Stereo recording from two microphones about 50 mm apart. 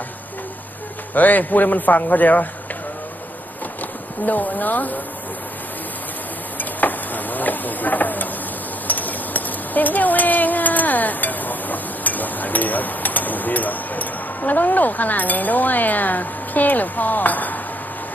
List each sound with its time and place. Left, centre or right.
1.1 s a man's voice: left
4.3 s a man's voice: left
6.6 s a sound: left